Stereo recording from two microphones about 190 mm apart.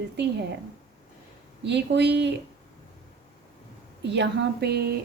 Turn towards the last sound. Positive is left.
turn(degrees=-60)  # may be behind; listen again after turning